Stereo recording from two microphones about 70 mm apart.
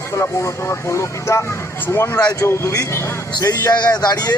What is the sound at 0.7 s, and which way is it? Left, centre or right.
A man's voice, left.